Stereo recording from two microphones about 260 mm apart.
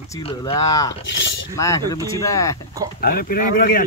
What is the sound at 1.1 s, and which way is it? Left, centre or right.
Speech, left.